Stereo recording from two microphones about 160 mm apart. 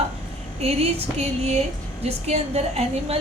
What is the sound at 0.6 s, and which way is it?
A woman's voice, 40° right (ahead or behind).